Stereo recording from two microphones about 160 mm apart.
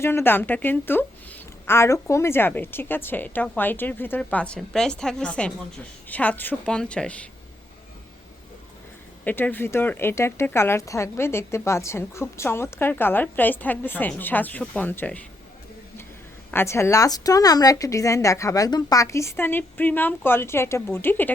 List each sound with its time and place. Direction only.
0.0 s speech: 15° left (ahead or behind)
9.2 s speech: 10° left (ahead or behind)
16.5 s speech: 15° left (ahead or behind)